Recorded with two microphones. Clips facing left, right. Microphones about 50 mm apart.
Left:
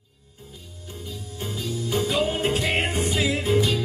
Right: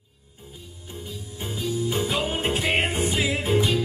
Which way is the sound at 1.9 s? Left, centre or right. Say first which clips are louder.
Left 5 dB; centre.